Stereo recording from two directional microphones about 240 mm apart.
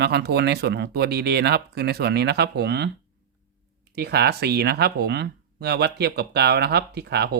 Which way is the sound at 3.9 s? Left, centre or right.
Right.